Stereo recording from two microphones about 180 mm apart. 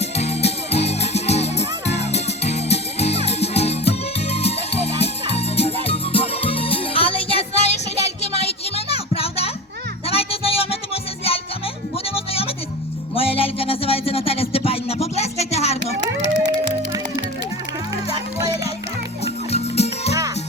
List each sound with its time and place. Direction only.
0.0 s music: 35° left (ahead or behind)
17.9 s music: 20° right (ahead or behind)
19.5 s music: 35° left (ahead or behind)